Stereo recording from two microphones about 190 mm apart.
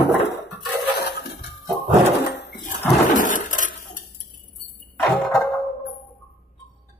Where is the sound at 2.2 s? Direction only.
65° left (ahead or behind).